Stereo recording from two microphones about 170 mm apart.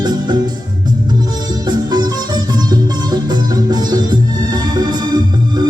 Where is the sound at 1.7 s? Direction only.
25° right (ahead or behind).